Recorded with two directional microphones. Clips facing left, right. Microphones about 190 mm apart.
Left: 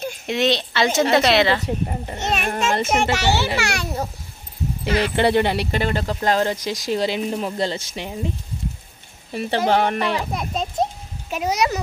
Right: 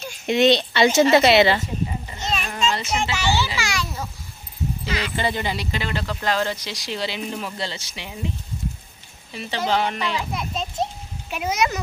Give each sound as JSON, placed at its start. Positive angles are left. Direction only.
{"t": 0.3, "sound": "speech", "side_deg": 0}
{"t": 1.6, "sound": "a child's voice", "side_deg": 60}
{"t": 9.3, "sound": "a child's voice", "side_deg": 55}